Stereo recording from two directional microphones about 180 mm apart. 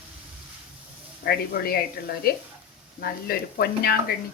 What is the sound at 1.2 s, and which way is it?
A woman's voice, 60° left (ahead or behind).